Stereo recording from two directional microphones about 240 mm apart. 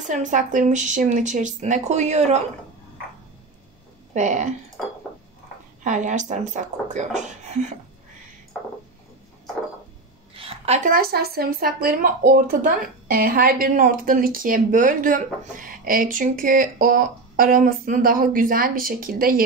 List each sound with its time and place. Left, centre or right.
0.0 s speech: right
4.1 s speech: right
5.9 s speech: right
10.3 s speech: right